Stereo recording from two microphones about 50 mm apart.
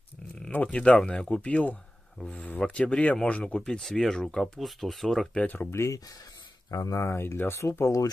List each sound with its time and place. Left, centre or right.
0.5 s speech: left
0.7 s speech: centre
3.8 s speech: centre
4.6 s speech: centre
5.4 s speech: left
5.7 s speech: left
7.0 s speech: left
7.6 s speech: left